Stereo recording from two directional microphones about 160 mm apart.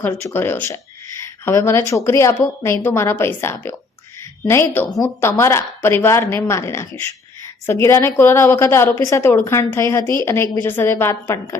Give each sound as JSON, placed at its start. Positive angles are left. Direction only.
{"t": 0.0, "sound": "a woman's voice", "side_deg": 20}
{"t": 1.2, "sound": "a sound", "side_deg": 15}
{"t": 1.9, "sound": "a woman's voice", "side_deg": 20}
{"t": 10.0, "sound": "a woman's voice", "side_deg": -25}
{"t": 10.2, "sound": "a woman's voice", "side_deg": 15}